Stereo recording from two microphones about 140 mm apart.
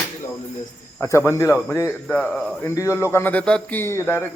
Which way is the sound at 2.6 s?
20° left (ahead or behind).